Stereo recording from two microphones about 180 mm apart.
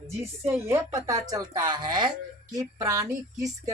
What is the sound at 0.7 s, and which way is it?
Speech, 20° right (ahead or behind).